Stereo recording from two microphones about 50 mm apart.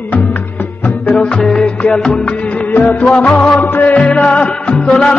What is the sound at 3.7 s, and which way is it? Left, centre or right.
Music, left.